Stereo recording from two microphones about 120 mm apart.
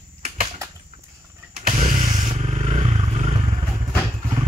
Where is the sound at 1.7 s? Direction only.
75° right (ahead or behind).